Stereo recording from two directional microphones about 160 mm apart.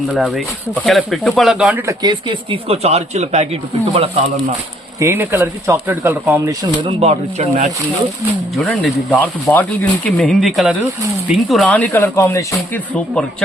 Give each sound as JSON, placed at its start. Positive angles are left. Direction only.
{"t": 0.2, "sound": "speech", "side_deg": 0}
{"t": 1.9, "sound": "a man's voice", "side_deg": -25}
{"t": 4.9, "sound": "speech", "side_deg": -15}
{"t": 6.8, "sound": "speech", "side_deg": -40}
{"t": 8.5, "sound": "speech", "side_deg": 0}